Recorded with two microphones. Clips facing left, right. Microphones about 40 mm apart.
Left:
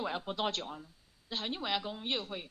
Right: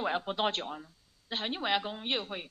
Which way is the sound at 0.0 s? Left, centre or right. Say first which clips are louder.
Right 4 dB; right.